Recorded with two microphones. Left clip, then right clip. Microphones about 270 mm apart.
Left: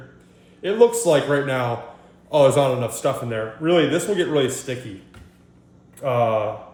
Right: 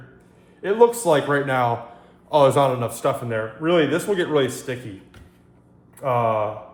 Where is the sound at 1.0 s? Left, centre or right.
Centre.